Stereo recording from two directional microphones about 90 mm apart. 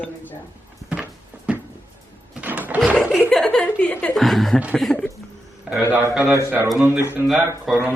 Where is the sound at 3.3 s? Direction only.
10° left (ahead or behind).